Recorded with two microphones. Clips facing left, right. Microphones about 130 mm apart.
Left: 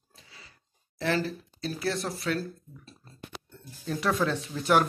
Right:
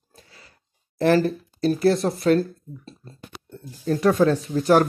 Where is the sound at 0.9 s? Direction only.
50° right (ahead or behind).